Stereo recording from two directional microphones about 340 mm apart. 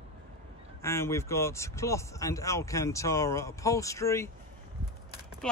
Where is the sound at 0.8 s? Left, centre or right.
Centre.